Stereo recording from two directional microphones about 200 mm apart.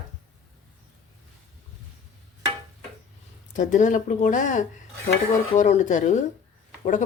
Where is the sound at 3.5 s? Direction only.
40° left (ahead or behind).